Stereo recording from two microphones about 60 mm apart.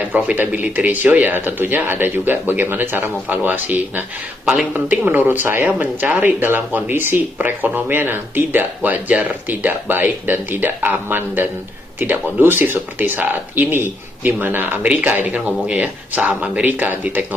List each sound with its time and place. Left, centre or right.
0.1 s speech: right